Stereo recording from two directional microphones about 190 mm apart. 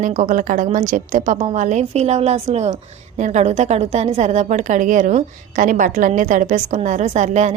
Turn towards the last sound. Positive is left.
turn(degrees=-40)  # may be behind; listen again after turning